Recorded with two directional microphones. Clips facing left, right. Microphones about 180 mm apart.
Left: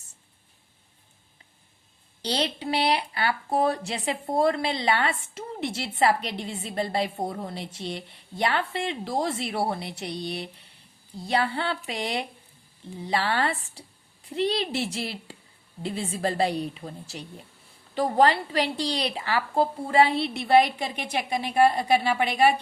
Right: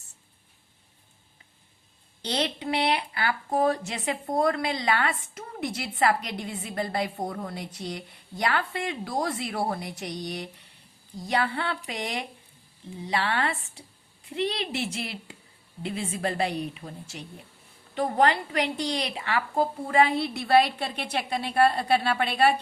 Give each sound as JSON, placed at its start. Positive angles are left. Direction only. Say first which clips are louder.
{"t": 2.2, "sound": "a woman's voice", "louder": "left 1 dB", "side_deg": 30}